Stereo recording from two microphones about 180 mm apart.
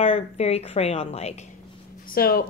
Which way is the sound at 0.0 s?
35° left (ahead or behind).